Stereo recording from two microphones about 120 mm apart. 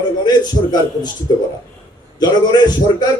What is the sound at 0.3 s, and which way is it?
A man's voice, 35° left (ahead or behind).